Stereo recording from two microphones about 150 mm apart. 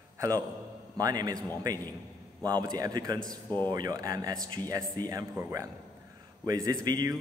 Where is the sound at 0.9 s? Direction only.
25° right (ahead or behind).